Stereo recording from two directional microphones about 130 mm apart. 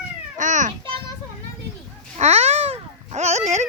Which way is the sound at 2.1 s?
55° right (ahead or behind).